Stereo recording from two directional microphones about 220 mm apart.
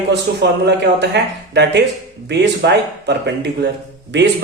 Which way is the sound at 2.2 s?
50° right (ahead or behind).